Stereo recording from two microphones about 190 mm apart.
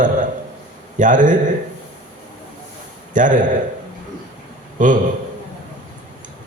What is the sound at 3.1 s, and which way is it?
Speech, 45° right (ahead or behind).